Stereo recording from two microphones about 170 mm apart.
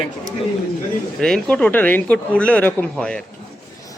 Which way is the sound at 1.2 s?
5° left (ahead or behind).